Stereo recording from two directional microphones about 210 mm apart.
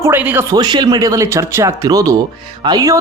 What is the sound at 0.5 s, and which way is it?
Speech, 20° right (ahead or behind).